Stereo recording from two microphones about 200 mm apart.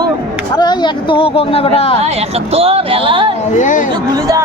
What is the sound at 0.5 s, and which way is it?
Speech, 20° left (ahead or behind).